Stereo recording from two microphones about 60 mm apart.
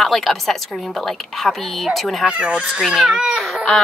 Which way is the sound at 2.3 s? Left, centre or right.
Centre.